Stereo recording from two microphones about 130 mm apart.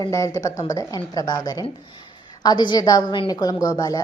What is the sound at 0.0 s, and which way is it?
A woman's voice, 25° left (ahead or behind).